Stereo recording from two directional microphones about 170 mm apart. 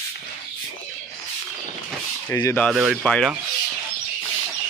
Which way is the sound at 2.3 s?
15° left (ahead or behind).